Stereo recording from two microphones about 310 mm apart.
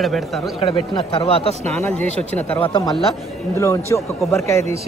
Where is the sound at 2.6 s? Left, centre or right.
Centre.